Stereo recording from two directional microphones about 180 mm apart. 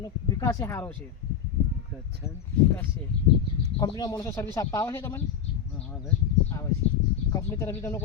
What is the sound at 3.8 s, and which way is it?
Speech, 20° left (ahead or behind).